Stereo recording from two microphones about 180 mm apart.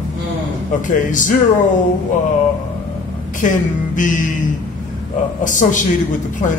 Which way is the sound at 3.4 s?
45° left (ahead or behind).